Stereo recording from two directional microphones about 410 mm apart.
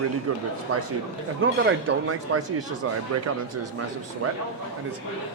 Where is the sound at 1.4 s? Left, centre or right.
Right.